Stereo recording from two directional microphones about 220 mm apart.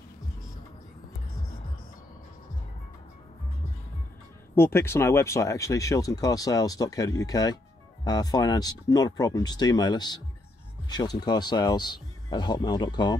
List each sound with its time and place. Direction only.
4.6 s speech: 10° left (ahead or behind)